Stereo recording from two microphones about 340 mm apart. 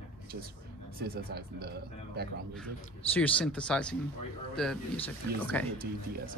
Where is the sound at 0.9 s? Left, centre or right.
Right.